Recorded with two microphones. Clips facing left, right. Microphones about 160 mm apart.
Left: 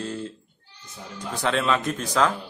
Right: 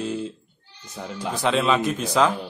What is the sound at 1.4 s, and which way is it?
Speech, 10° right (ahead or behind).